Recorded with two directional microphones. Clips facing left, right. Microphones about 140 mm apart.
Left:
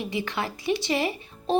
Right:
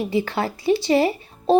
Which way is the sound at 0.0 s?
35° right (ahead or behind).